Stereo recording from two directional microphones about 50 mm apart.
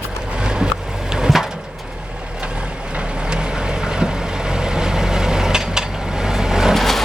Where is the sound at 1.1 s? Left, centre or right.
Centre.